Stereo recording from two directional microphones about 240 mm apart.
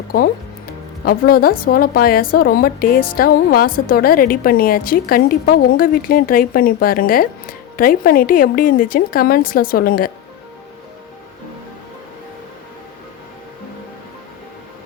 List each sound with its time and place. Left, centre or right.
0.1 s a woman's voice: left